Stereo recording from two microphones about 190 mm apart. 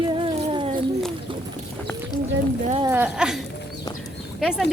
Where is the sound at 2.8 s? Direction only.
10° right (ahead or behind).